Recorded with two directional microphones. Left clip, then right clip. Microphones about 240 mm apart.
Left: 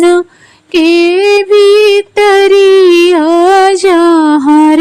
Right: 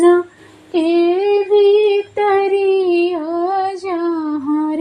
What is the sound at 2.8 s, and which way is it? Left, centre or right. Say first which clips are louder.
Music: left 11 dB; left.